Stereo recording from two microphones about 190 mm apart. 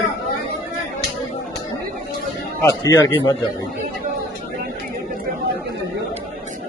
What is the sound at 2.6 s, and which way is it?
Speech, 15° left (ahead or behind).